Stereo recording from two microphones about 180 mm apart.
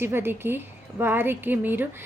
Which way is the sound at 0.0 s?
10° right (ahead or behind).